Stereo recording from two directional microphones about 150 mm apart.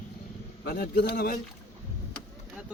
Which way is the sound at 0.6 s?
85° left.